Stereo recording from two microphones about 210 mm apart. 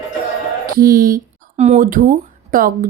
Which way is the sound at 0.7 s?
45° right (ahead or behind).